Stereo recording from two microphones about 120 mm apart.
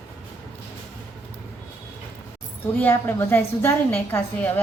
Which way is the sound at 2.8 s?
15° left (ahead or behind).